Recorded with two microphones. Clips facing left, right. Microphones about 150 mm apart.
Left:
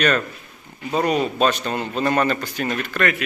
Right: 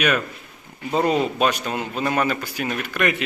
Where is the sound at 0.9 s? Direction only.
20° right (ahead or behind).